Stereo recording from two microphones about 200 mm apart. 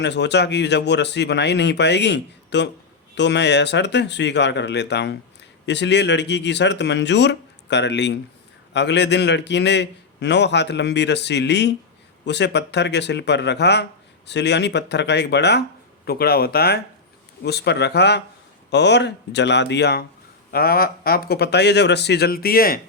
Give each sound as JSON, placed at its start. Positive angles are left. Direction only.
{"t": 0.0, "sound": "speech", "side_deg": 60}